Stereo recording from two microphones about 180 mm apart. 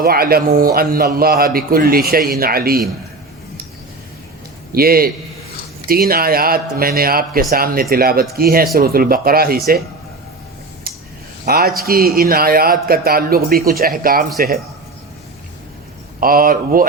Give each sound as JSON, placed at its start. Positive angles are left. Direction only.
{"t": 0.0, "sound": "a man's voice", "side_deg": -55}
{"t": 4.7, "sound": "a man's voice", "side_deg": -55}
{"t": 10.9, "sound": "a sound", "side_deg": -55}
{"t": 11.4, "sound": "a man's voice", "side_deg": -60}
{"t": 16.2, "sound": "speech", "side_deg": -55}